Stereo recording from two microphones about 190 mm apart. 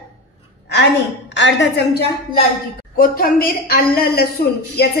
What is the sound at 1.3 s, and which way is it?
Speech, 70° left (ahead or behind).